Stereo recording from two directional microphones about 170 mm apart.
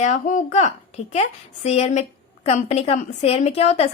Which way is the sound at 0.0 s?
50° left (ahead or behind).